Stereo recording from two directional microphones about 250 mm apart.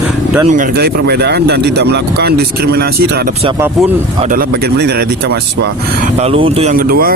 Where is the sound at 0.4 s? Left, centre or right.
Right.